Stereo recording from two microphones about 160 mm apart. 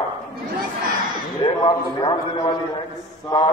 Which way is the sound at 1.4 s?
25° left (ahead or behind).